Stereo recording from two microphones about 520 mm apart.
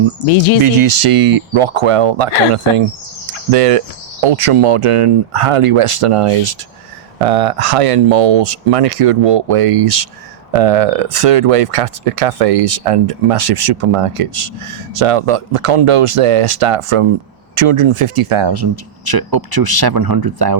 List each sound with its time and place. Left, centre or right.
0.3 s speech: left
0.6 s speech: right
3.5 s speech: right
7.2 s speech: right